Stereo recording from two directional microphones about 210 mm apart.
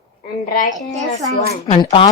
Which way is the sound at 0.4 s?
40° left (ahead or behind).